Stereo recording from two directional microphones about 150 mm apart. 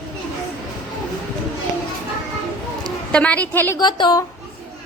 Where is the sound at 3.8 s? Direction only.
30° left (ahead or behind).